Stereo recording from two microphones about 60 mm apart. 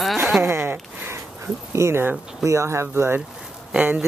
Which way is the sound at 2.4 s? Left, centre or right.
Right.